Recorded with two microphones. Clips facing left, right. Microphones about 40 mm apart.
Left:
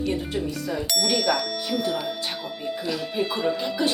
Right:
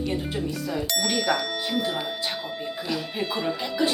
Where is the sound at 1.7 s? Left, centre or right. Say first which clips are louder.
Left 2 dB; right.